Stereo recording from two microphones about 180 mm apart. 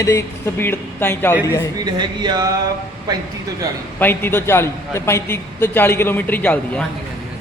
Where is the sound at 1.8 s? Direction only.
25° right (ahead or behind).